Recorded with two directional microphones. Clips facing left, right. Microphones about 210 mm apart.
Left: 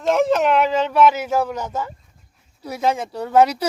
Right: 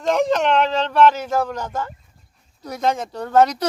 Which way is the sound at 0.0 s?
5° left (ahead or behind).